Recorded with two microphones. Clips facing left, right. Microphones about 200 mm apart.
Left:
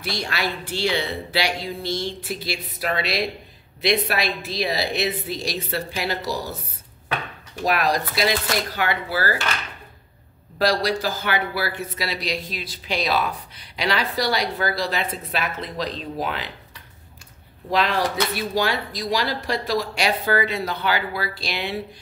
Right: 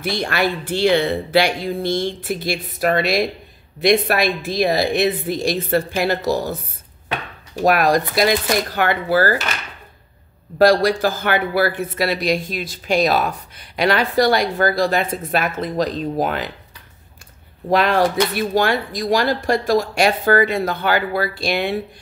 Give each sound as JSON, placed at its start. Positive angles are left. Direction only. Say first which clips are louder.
{"t": 0.0, "sound": "speech", "louder": "right 7 dB", "side_deg": -55}
{"t": 7.6, "sound": "speech", "louder": "right 6 dB", "side_deg": -50}
{"t": 10.6, "sound": "speech", "louder": "right 7 dB", "side_deg": -50}
{"t": 17.6, "sound": "speech", "louder": "right 6 dB", "side_deg": -55}